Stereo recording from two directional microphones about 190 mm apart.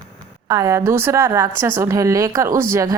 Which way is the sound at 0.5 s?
15° right (ahead or behind).